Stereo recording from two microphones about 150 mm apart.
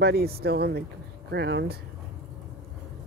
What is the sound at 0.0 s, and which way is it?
Speech, 90° right.